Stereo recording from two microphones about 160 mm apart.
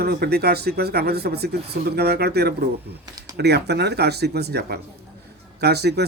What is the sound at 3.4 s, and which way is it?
Speech, 90° right.